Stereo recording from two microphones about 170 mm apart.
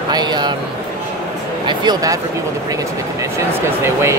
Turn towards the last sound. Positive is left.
turn(degrees=-15)  # may be behind; listen again after turning